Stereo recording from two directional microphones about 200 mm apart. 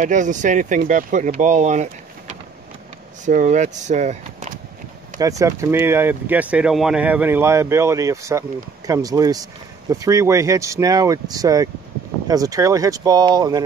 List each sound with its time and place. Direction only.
0.0 s speech: 40° right (ahead or behind)
5.4 s speech: 15° right (ahead or behind)